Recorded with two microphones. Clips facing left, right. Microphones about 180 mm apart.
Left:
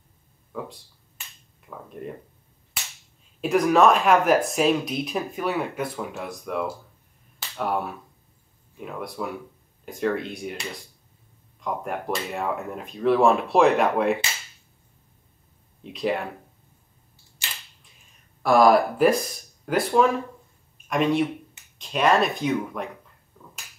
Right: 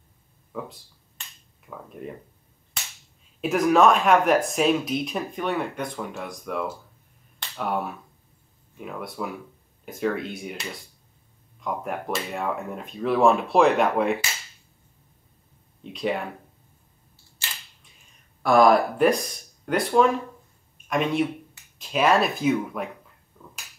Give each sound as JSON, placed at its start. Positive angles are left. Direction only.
{"t": 0.5, "sound": "a sound", "side_deg": 0}
{"t": 1.9, "sound": "speech", "side_deg": 0}
{"t": 3.3, "sound": "speech", "side_deg": 0}
{"t": 7.3, "sound": "finger snapping", "side_deg": 0}
{"t": 8.7, "sound": "speech", "side_deg": 0}
{"t": 15.8, "sound": "speech", "side_deg": 0}
{"t": 18.4, "sound": "speech", "side_deg": 0}